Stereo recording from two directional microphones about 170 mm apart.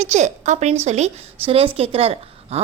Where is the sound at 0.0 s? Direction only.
45° right (ahead or behind).